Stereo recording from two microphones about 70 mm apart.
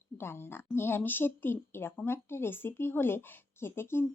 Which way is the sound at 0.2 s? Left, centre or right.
Left.